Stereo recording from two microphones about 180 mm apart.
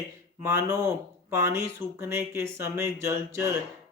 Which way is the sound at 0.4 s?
15° right (ahead or behind).